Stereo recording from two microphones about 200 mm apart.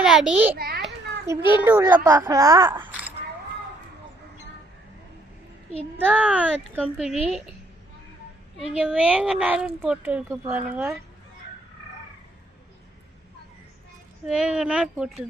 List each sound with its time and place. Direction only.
0.0 s speech: 5° right (ahead or behind)
0.5 s a child's voice: 50° right (ahead or behind)
1.3 s speech: 10° right (ahead or behind)
6.1 s speech: 10° right (ahead or behind)
8.8 s speech: 5° right (ahead or behind)
14.3 s speech: 5° right (ahead or behind)